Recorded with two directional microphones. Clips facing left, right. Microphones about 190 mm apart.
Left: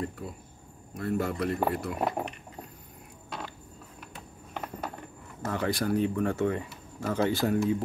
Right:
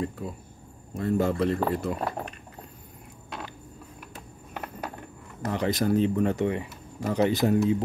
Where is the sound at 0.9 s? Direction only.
25° right (ahead or behind).